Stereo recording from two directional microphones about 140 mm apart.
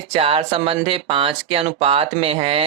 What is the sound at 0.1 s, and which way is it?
Speech, 40° right (ahead or behind).